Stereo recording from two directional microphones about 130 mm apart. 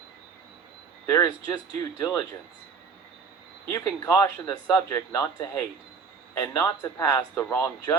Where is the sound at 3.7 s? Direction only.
30° left (ahead or behind).